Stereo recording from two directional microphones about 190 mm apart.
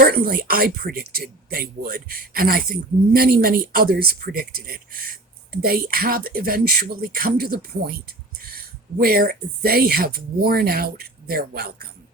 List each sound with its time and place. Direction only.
0.0 s speech: 50° right (ahead or behind)
9.0 s speech: 50° right (ahead or behind)